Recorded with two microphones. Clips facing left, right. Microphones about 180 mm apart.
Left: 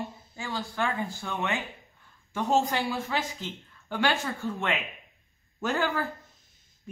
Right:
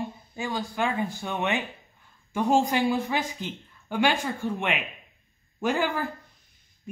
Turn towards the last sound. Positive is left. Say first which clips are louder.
# right 2 dB
turn(degrees=-15)  # may be behind; listen again after turning